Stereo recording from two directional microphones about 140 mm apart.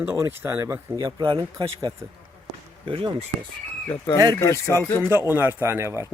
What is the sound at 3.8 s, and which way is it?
Speech, 20° left (ahead or behind).